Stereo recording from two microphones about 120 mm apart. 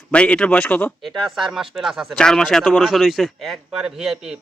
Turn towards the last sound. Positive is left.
turn(degrees=-5)  # may be behind; listen again after turning